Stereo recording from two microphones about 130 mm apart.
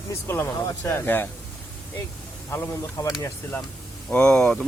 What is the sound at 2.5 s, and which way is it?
Speech, 20° left (ahead or behind).